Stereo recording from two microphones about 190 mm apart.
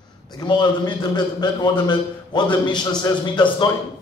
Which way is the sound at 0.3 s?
25° left (ahead or behind).